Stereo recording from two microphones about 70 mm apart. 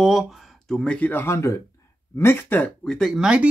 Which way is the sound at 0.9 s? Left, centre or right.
Left.